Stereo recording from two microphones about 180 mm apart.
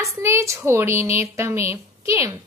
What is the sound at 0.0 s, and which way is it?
A woman's voice, 15° right (ahead or behind).